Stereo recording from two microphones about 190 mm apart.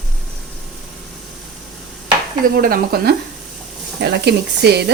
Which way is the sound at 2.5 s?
50° right (ahead or behind).